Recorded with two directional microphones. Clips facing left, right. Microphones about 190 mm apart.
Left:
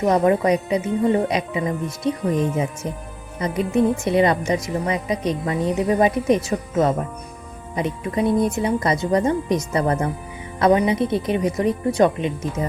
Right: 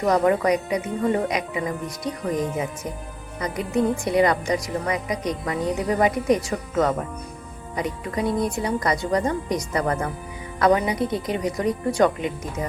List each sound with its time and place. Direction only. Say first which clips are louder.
0.0 s a woman's voice: left 2 dB; 25° left (ahead or behind)
3.4 s a woman's voice: left 4 dB; 25° left (ahead or behind)